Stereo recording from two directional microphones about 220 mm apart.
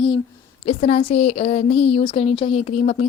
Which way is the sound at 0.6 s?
30° left (ahead or behind).